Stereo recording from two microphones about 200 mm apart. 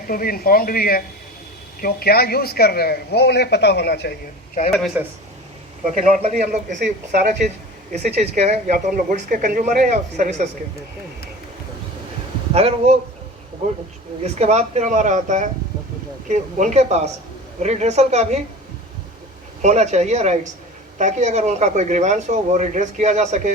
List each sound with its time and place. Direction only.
0.1 s a man's voice: 45° left (ahead or behind)
4.9 s speech: 10° right (ahead or behind)
5.9 s speech: 40° right (ahead or behind)
12.5 s speech: 30° right (ahead or behind)
14.3 s speech: 35° right (ahead or behind)
19.6 s speech: 35° right (ahead or behind)